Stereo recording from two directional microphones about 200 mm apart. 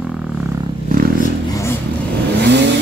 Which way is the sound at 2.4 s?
60° right (ahead or behind).